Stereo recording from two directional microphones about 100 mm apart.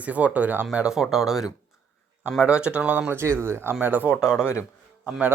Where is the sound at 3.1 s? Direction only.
25° right (ahead or behind).